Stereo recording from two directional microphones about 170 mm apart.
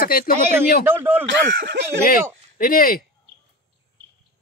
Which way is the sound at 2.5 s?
55° left (ahead or behind).